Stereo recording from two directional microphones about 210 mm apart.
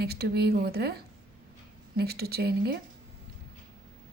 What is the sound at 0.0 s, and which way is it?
Speech, 50° right (ahead or behind).